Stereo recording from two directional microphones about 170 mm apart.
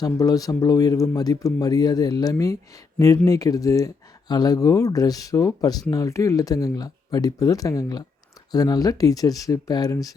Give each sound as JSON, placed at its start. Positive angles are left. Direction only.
{"t": 0.0, "sound": "speech", "side_deg": 20}